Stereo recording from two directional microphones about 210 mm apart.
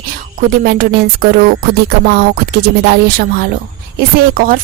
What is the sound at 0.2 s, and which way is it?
Speech, 45° right (ahead or behind).